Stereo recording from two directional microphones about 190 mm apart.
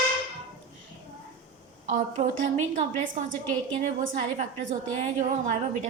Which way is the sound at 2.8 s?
45° right (ahead or behind).